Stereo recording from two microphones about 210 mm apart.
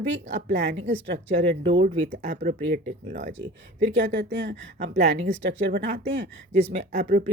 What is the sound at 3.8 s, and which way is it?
Speech, 55° right (ahead or behind).